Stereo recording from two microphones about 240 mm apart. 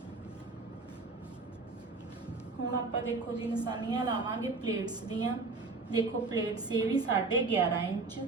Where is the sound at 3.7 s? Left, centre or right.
Centre.